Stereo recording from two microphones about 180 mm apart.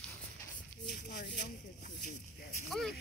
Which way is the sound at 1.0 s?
65° left (ahead or behind).